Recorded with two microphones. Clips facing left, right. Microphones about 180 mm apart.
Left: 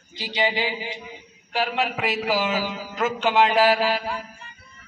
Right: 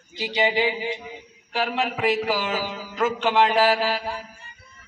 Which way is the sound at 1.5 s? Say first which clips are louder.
Even; centre (ahead or behind).